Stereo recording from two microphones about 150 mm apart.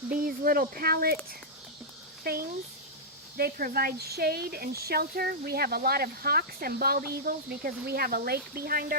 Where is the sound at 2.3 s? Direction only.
90° right.